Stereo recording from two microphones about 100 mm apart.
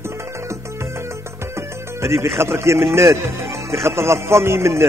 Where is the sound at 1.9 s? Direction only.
25° right (ahead or behind).